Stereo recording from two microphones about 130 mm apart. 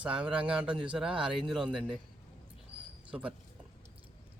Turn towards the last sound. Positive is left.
turn(degrees=-10)  # may be behind; listen again after turning